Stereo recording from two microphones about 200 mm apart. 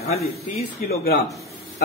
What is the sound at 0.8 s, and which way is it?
Speech, 45° left (ahead or behind).